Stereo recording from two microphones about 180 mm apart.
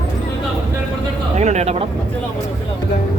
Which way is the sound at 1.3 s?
40° right (ahead or behind).